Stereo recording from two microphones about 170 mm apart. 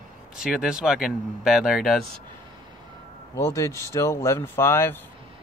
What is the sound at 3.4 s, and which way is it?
Speech, 20° left (ahead or behind).